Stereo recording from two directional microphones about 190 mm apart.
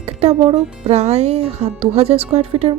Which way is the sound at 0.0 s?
35° right (ahead or behind).